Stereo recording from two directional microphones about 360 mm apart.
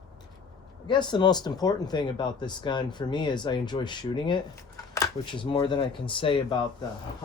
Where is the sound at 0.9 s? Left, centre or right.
Centre.